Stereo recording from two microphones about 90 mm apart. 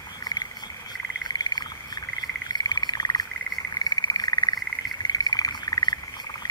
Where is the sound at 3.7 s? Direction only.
45° left (ahead or behind).